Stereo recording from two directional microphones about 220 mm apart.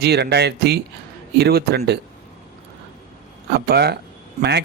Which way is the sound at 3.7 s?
45° right (ahead or behind).